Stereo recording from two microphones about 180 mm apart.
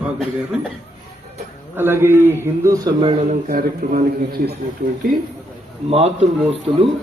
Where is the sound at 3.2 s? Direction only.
50° right (ahead or behind).